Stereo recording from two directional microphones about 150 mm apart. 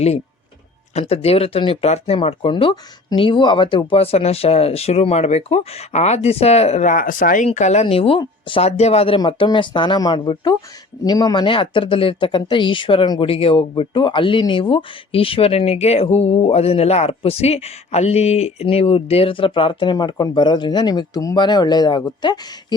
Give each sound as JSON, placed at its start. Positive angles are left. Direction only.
{"t": 0.9, "sound": "speech", "side_deg": 45}
{"t": 7.4, "sound": "speech", "side_deg": 50}